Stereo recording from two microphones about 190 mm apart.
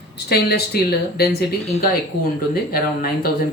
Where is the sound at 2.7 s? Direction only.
50° left (ahead or behind).